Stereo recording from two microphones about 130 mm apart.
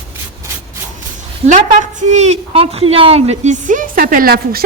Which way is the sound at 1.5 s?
65° right (ahead or behind).